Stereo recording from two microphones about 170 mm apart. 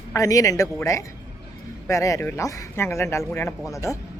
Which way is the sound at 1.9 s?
20° left (ahead or behind).